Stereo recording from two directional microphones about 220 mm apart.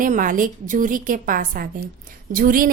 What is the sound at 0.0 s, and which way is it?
A woman's voice, 35° right (ahead or behind).